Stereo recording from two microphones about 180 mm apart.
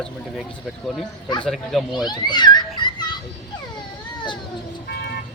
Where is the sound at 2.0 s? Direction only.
25° left (ahead or behind).